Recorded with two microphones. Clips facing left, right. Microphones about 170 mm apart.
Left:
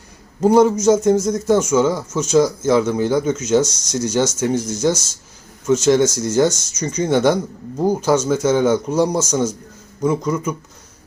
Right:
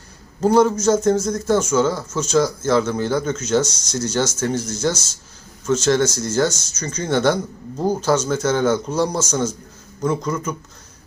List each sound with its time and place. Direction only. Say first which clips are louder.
0.4 s a man's voice: left 3 dB; 15° left (ahead or behind)